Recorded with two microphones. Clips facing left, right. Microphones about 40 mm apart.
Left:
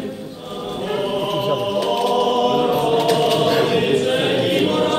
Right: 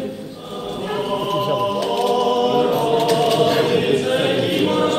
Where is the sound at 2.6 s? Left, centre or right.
Centre.